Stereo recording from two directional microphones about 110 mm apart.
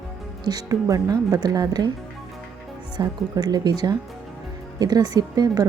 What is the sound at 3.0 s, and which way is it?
Speech, 35° right (ahead or behind).